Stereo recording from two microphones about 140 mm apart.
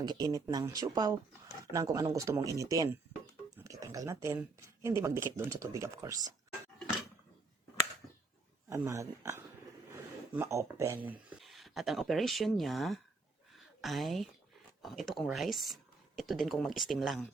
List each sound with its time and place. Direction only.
0.0 s speech: 30° right (ahead or behind)
8.7 s speech: 20° right (ahead or behind); by 17.2 s centre (ahead or behind)